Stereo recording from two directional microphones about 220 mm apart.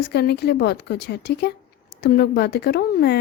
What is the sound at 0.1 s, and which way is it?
Speech, 50° left (ahead or behind).